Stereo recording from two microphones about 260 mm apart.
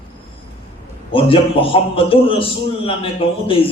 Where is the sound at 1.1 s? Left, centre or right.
Left.